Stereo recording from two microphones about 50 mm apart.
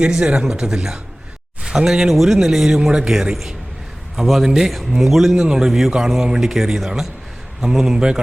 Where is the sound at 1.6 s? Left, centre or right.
Centre.